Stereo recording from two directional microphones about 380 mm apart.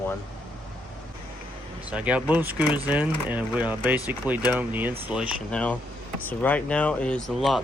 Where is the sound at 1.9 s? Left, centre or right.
Centre.